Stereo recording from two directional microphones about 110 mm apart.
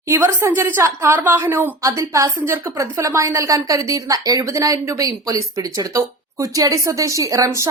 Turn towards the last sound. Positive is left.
turn(degrees=-30)  # may be behind; listen again after turning